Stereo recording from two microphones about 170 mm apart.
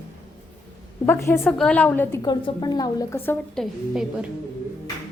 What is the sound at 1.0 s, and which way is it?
A woman's voice, 15° left (ahead or behind).